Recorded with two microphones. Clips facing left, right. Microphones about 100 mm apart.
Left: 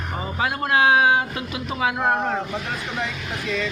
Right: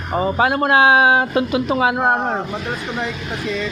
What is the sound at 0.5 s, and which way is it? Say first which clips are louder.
Speech: right 6 dB; 80° right.